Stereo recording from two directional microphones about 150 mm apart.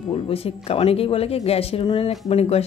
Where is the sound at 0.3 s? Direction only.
40° left (ahead or behind).